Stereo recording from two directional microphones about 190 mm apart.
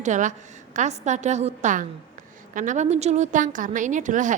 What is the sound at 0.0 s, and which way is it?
A woman's voice, 40° right (ahead or behind).